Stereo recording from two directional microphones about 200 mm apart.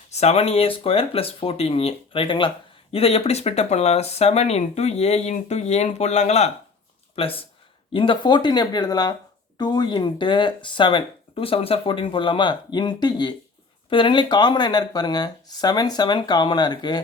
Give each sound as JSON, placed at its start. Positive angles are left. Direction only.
{"t": 0.1, "sound": "speech", "side_deg": 30}